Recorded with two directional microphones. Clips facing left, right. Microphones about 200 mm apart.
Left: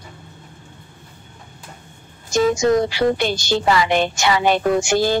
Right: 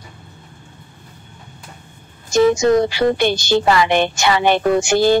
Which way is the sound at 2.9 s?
65° right (ahead or behind).